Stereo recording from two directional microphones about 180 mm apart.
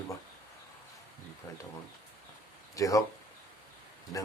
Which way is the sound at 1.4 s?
20° left (ahead or behind).